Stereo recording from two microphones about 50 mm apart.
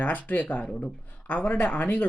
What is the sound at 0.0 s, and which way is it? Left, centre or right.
Speech, left.